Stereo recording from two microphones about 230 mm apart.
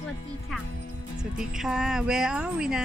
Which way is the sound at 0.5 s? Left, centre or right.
Centre.